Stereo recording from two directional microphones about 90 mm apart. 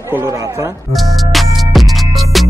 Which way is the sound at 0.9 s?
Centre (ahead or behind).